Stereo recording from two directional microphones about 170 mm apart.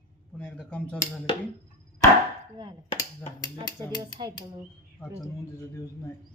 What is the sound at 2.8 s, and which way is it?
Finger snapping, 40° left (ahead or behind).